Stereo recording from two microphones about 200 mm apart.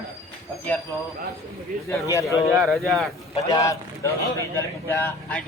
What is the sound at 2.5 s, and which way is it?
Speech, centre (ahead or behind).